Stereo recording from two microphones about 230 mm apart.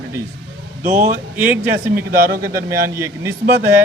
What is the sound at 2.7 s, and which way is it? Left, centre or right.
Speech, centre.